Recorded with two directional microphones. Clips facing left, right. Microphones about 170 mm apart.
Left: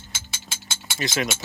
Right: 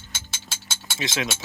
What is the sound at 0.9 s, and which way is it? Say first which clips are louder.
Speech: left 2 dB; centre (ahead or behind).